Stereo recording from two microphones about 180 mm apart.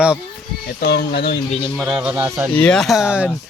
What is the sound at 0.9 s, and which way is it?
Speech, 65° left (ahead or behind).